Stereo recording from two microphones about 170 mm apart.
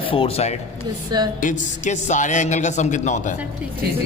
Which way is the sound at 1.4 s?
50° left (ahead or behind).